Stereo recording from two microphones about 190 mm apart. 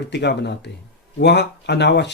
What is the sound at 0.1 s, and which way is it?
Speech, 65° left (ahead or behind).